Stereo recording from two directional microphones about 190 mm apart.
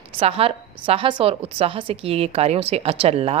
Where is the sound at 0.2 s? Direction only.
30° right (ahead or behind).